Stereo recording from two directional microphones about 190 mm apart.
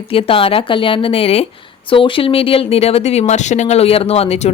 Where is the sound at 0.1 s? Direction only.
30° left (ahead or behind).